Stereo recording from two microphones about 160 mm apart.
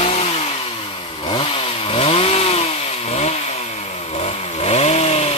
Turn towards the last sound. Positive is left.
turn(degrees=40)  # may be behind; listen again after turning